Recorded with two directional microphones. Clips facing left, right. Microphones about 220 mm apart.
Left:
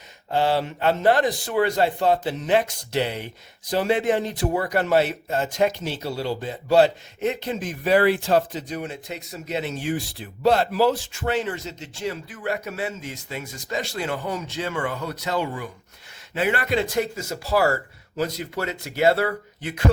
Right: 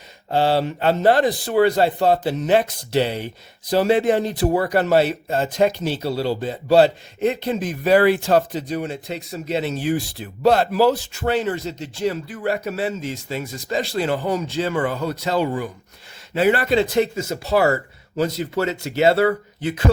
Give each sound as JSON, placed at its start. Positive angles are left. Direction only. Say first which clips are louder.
{"t": 0.3, "sound": "speech", "louder": "right 3 dB", "side_deg": -30}